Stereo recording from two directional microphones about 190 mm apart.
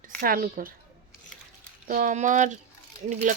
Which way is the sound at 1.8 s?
45° right (ahead or behind).